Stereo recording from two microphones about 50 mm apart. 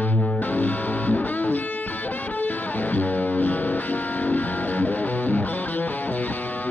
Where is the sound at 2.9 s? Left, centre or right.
Left.